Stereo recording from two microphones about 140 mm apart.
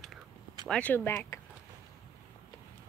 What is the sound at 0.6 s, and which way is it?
Speech, 10° left (ahead or behind).